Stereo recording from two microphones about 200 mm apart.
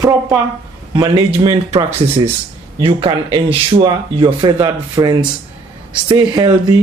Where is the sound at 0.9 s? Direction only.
25° right (ahead or behind).